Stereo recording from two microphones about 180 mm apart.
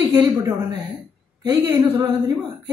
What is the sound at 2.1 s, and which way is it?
Speech, 20° right (ahead or behind).